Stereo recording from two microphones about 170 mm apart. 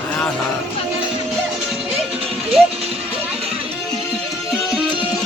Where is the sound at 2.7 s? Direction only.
35° right (ahead or behind).